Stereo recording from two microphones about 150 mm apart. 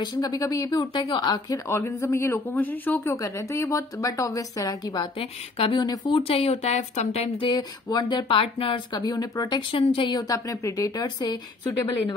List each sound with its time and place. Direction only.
0.0 s speech: 30° left (ahead or behind)
1.7 s speech: 20° left (ahead or behind)
5.2 s speech: 35° left (ahead or behind)
8.9 s speech: 25° left (ahead or behind)